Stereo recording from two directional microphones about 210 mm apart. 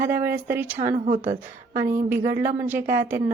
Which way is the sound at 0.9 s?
35° right (ahead or behind).